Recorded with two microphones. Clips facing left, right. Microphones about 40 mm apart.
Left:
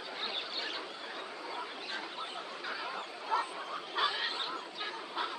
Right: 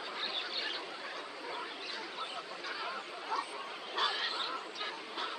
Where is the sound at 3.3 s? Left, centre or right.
Left.